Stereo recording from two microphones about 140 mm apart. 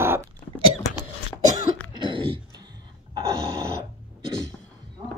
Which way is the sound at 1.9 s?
35° right (ahead or behind).